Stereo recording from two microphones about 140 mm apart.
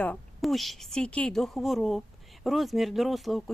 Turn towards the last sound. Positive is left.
turn(degrees=0)  # may be behind; listen again after turning